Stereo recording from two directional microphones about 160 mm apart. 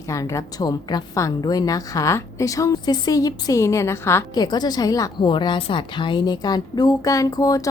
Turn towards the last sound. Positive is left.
turn(degrees=20)  # may be behind; listen again after turning